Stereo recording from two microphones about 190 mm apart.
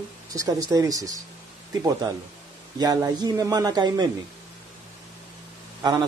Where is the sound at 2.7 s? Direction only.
20° right (ahead or behind).